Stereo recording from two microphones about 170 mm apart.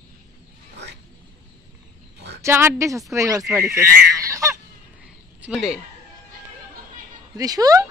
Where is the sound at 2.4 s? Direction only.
15° right (ahead or behind).